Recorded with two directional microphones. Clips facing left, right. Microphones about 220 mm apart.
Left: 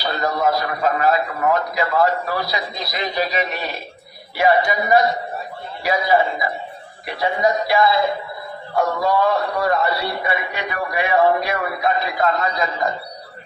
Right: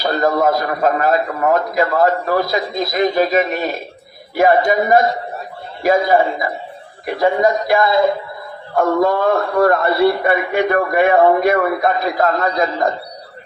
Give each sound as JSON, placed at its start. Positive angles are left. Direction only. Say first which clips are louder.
{"t": 0.0, "sound": "a man's voice", "louder": "right 5 dB", "side_deg": -50}